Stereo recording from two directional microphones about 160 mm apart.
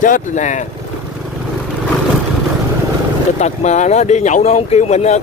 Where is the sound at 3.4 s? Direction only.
45° left (ahead or behind).